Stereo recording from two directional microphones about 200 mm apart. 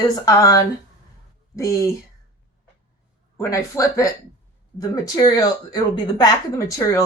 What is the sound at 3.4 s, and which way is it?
Speech, 15° left (ahead or behind).